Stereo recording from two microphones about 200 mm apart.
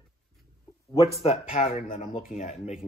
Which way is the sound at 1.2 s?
30° left (ahead or behind).